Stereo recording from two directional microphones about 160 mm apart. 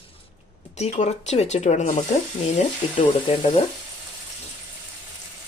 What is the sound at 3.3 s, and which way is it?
Speech, 35° left (ahead or behind).